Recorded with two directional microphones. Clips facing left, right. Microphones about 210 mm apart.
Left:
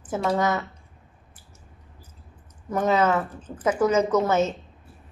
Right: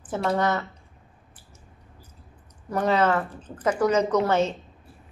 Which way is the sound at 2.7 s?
5° left (ahead or behind).